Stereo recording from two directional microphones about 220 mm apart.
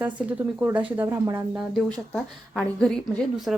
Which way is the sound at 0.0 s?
5° right (ahead or behind).